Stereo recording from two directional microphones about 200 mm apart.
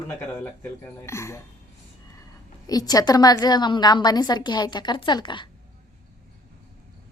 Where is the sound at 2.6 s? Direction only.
20° left (ahead or behind).